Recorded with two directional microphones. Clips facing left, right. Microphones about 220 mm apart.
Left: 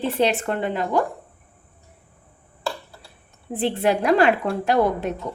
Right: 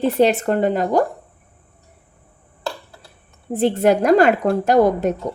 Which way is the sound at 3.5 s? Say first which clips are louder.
Right 5 dB; 45° right (ahead or behind).